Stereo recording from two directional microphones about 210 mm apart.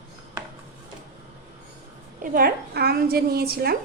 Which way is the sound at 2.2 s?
45° right (ahead or behind).